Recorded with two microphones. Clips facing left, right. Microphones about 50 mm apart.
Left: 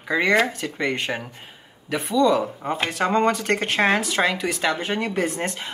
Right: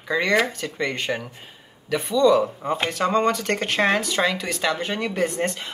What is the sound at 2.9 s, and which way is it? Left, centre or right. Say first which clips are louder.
Speech: left 1 dB; left.